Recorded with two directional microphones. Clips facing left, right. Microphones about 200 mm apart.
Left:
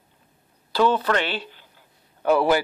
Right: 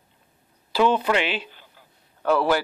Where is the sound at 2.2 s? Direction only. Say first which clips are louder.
Left 2 dB; 15° left (ahead or behind).